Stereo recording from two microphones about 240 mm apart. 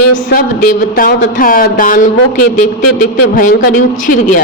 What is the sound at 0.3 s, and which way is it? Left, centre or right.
Speech, left.